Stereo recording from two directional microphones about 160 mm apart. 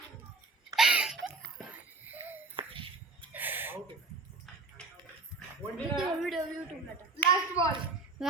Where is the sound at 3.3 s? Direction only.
10° right (ahead or behind).